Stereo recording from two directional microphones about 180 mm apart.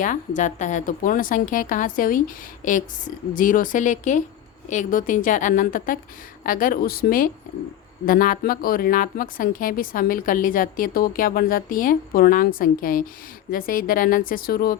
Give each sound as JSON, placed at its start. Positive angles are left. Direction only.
{"t": 0.0, "sound": "speech", "side_deg": 45}